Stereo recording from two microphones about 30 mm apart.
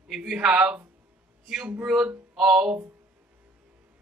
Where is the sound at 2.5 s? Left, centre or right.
Right.